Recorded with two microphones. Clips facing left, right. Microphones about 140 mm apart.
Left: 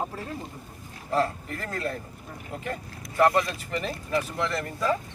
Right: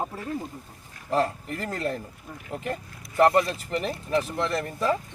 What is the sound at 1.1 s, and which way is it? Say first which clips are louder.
Speech: right 1 dB; 35° right (ahead or behind).